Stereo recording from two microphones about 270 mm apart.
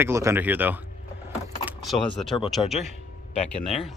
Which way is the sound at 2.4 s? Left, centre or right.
Centre.